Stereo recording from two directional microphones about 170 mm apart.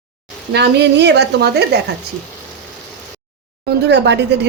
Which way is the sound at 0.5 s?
80° right.